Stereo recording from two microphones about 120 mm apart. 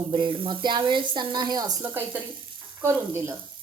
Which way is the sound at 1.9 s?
15° right (ahead or behind).